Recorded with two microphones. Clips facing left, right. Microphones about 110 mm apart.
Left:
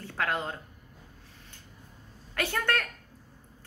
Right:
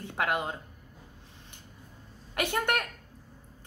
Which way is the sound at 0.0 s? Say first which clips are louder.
Right 1 dB; 20° right (ahead or behind).